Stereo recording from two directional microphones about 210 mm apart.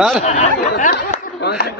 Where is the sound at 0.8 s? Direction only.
45° left (ahead or behind).